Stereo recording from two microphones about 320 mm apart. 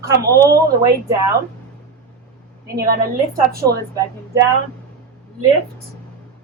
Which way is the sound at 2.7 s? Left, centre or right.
Right.